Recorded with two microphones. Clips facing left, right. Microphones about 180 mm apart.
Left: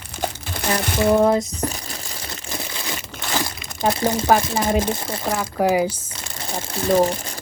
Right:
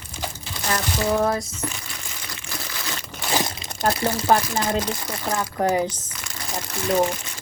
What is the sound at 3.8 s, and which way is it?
Speech, 20° left (ahead or behind).